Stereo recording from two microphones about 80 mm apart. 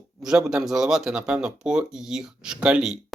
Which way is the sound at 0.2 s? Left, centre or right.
Centre.